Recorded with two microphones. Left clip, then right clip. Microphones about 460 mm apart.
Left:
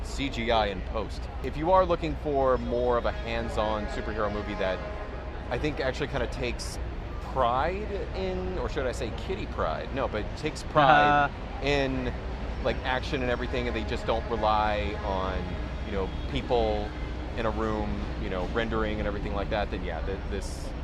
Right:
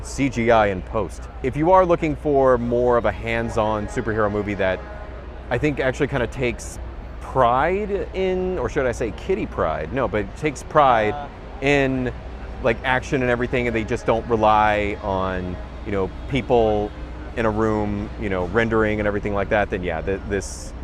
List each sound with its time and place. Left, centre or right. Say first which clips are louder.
0.4 s speech: right 9 dB; right